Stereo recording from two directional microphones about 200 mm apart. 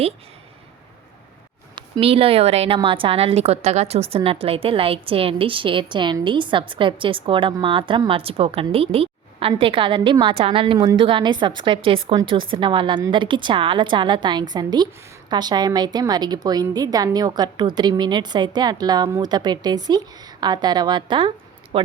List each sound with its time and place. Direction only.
1.7 s a woman's voice: 30° right (ahead or behind)